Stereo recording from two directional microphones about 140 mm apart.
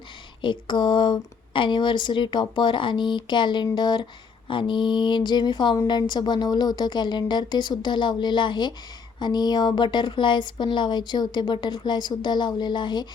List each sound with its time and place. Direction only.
0.4 s speech: 35° left (ahead or behind)